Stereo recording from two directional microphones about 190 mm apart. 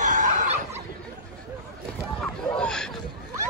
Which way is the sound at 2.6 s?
5° left (ahead or behind).